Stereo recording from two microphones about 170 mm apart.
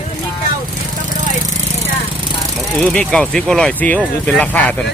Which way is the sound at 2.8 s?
5° left (ahead or behind).